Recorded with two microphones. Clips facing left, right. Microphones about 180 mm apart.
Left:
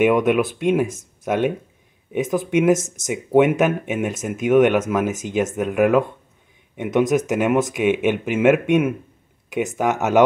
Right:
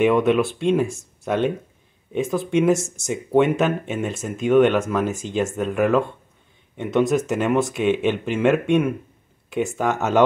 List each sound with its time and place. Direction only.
0.0 s speech: 10° left (ahead or behind)
4.5 s speech: 5° left (ahead or behind)
4.7 s speech: 15° left (ahead or behind)